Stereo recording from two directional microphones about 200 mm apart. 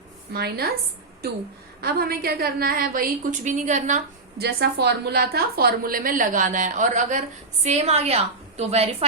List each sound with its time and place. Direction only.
0.3 s a woman's voice: 50° right (ahead or behind)
1.8 s a woman's voice: 50° right (ahead or behind)
4.4 s a woman's voice: 55° right (ahead or behind); by 9.0 s 30° right (ahead or behind)